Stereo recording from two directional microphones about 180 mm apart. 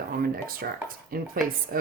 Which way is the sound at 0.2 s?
55° right (ahead or behind).